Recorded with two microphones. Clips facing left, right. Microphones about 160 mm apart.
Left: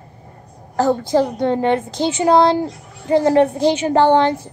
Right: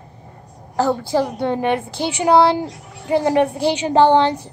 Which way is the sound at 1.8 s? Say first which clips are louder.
Left 4 dB; 20° left (ahead or behind).